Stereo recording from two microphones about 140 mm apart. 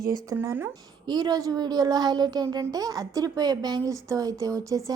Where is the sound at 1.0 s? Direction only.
30° right (ahead or behind).